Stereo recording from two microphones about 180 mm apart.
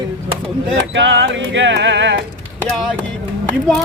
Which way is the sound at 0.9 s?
90° right.